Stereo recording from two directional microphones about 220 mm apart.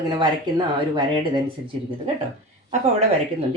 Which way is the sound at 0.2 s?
20° right (ahead or behind).